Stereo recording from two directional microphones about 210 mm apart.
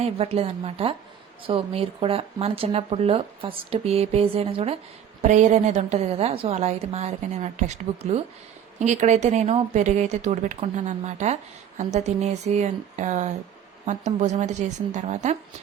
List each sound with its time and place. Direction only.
0.0 s speech: 30° right (ahead or behind)